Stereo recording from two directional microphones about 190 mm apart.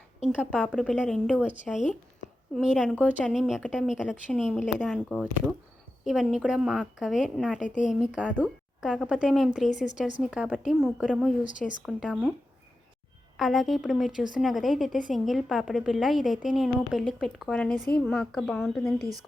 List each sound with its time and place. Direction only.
0.3 s a woman's voice: 5° left (ahead or behind)
7.6 s a woman's voice: 40° left (ahead or behind)
7.9 s a woman's voice: 5° right (ahead or behind)
13.3 s a woman's voice: centre (ahead or behind)